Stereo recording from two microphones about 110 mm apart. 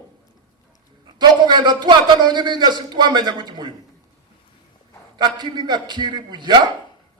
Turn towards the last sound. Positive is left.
turn(degrees=-40)  # may be behind; listen again after turning